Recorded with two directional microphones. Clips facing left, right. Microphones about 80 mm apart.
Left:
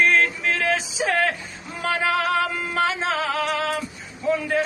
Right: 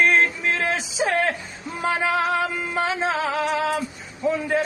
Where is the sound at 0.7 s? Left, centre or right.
Right.